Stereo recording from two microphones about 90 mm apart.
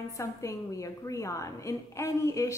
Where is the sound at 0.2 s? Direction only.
35° left (ahead or behind).